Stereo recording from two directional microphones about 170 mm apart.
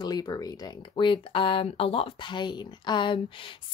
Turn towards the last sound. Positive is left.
turn(degrees=30)  # may be behind; listen again after turning